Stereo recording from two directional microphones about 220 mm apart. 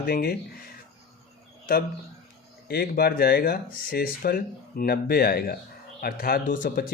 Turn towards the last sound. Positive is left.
turn(degrees=40)  # may be behind; listen again after turning